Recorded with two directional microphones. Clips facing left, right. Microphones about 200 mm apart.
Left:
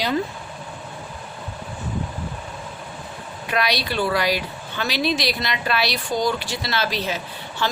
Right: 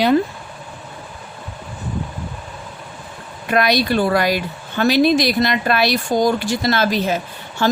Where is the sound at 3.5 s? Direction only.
50° right (ahead or behind).